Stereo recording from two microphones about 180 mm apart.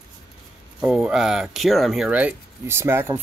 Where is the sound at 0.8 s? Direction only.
5° right (ahead or behind).